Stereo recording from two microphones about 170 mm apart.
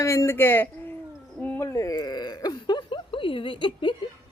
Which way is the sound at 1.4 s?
15° left (ahead or behind).